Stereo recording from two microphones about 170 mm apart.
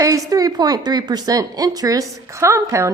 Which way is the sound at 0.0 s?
20° right (ahead or behind).